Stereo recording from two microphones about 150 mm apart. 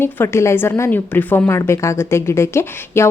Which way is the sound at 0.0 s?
15° left (ahead or behind).